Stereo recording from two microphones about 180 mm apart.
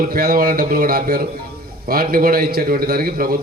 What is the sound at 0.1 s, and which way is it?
A man's voice, 55° right (ahead or behind).